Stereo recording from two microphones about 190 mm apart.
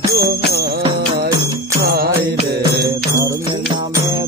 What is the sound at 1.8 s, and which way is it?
Music, 55° right (ahead or behind).